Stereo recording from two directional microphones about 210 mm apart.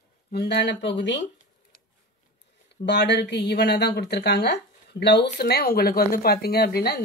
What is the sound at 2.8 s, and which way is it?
Speech, 55° left (ahead or behind).